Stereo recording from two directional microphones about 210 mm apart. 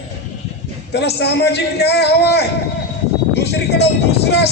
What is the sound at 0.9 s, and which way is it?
Speech, 55° left (ahead or behind).